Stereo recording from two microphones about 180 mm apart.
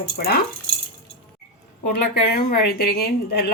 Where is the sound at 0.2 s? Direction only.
60° left (ahead or behind).